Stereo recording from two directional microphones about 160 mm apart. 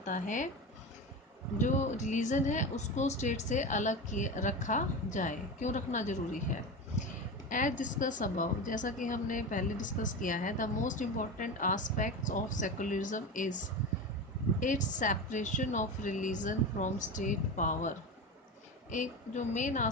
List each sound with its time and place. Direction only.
0.0 s a woman's voice: 50° left (ahead or behind)
1.6 s a woman's voice: 50° left (ahead or behind)
7.5 s a woman's voice: 55° left (ahead or behind)
14.6 s a woman's voice: 50° left (ahead or behind)